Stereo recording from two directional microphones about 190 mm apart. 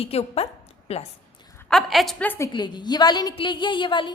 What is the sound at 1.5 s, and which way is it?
Speech, 5° left (ahead or behind).